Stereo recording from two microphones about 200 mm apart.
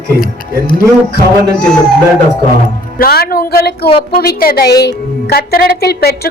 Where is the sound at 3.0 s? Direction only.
50° left (ahead or behind).